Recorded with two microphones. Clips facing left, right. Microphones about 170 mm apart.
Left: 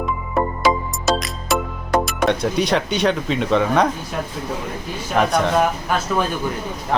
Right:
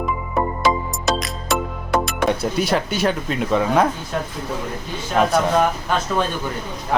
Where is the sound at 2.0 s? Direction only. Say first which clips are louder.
Left 1 dB; 5° right (ahead or behind).